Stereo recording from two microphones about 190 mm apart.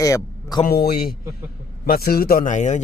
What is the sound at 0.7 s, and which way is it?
A man's voice, 55° left (ahead or behind).